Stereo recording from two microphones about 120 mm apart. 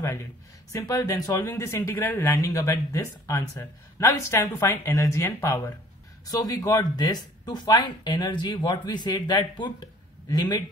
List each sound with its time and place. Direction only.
0.7 s speech: 25° left (ahead or behind)